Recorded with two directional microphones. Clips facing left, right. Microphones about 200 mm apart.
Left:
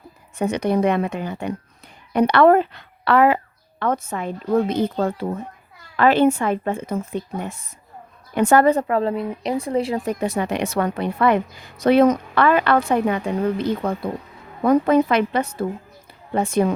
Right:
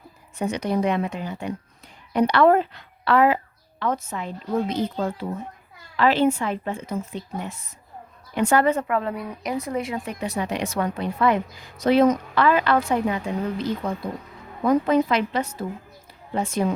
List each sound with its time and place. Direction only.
0.3 s a woman's voice: 60° left (ahead or behind)